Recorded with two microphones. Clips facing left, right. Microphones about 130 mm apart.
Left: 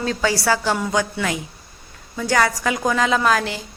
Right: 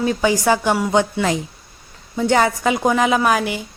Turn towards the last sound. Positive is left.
turn(degrees=-15)  # may be behind; listen again after turning